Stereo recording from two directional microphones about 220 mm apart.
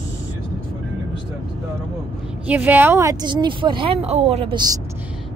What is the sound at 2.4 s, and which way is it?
Speech, 10° right (ahead or behind).